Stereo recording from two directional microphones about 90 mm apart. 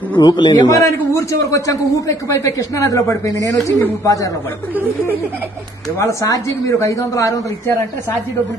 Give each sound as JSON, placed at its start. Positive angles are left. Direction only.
{"t": 0.1, "sound": "a man's voice", "side_deg": 55}
{"t": 0.7, "sound": "speech", "side_deg": 35}
{"t": 5.9, "sound": "speech", "side_deg": 35}